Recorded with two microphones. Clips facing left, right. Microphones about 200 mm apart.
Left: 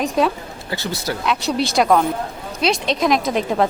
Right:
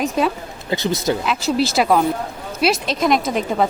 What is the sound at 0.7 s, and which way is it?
Speech, 20° right (ahead or behind).